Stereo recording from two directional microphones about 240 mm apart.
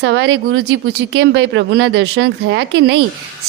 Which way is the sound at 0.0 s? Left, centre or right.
Right.